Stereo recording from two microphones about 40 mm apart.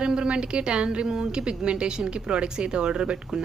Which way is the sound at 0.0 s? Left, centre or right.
Right.